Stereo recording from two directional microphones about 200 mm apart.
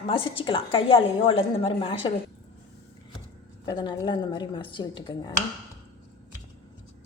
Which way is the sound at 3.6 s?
20° left (ahead or behind).